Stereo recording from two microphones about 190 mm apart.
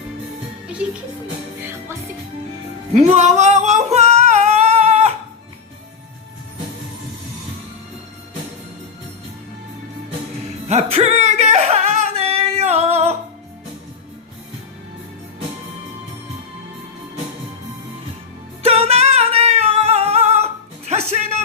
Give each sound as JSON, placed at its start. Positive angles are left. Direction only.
{"t": 2.9, "sound": "singing", "side_deg": -35}
{"t": 10.7, "sound": "singing", "side_deg": -35}
{"t": 18.6, "sound": "singing", "side_deg": -30}